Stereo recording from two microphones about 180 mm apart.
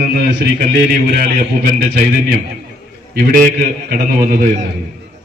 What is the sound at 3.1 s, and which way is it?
A man's voice, 55° right (ahead or behind).